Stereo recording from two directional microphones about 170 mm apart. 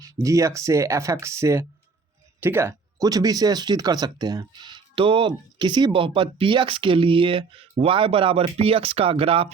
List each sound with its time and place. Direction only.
0.0 s speech: 20° right (ahead or behind); by 9.5 s 35° right (ahead or behind)